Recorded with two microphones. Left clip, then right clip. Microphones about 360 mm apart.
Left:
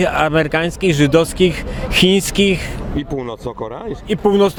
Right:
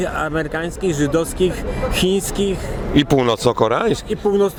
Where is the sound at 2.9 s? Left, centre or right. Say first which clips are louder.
Right 10 dB; right.